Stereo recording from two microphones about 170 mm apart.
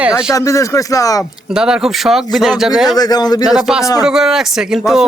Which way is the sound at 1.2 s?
5° right (ahead or behind).